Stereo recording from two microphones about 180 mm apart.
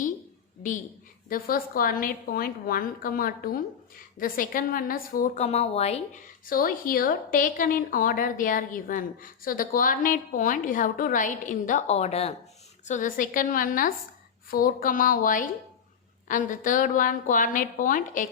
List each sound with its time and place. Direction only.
1.3 s a woman's voice: 55° left (ahead or behind); by 6.0 s 35° left (ahead or behind)
6.4 s a woman's voice: 55° left (ahead or behind)